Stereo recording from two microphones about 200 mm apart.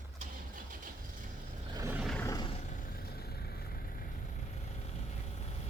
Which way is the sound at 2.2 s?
20° left (ahead or behind).